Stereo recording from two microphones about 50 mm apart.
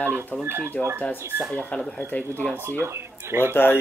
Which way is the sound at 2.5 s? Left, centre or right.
Right.